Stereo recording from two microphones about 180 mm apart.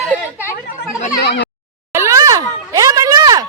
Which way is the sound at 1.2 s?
70° left (ahead or behind).